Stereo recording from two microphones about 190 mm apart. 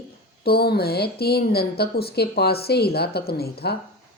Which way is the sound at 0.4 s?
55° left (ahead or behind).